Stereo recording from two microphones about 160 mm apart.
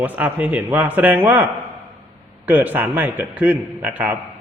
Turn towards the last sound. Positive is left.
turn(degrees=-10)  # may be behind; listen again after turning